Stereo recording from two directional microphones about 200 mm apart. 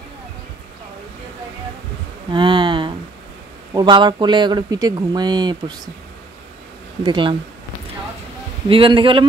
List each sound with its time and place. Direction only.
2.3 s a sound: 25° right (ahead or behind)
3.7 s speech: 20° right (ahead or behind)
7.0 s speech: 20° right (ahead or behind)
8.6 s speech: 25° right (ahead or behind)